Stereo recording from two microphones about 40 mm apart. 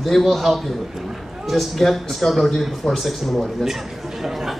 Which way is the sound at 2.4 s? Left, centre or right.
Centre.